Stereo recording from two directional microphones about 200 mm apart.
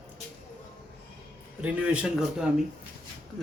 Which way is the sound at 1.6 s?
5° right (ahead or behind).